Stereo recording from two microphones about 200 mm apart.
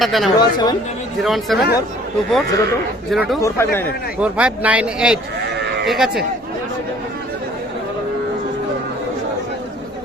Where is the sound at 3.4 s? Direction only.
15° left (ahead or behind).